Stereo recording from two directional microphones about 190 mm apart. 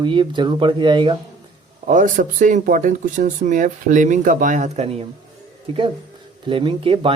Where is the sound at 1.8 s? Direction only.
40° right (ahead or behind).